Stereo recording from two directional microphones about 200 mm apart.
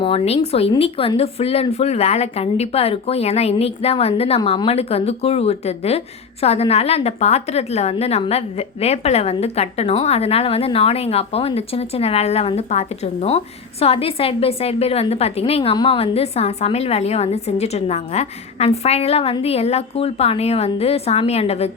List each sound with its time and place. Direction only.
0.0 s a woman's voice: 30° left (ahead or behind)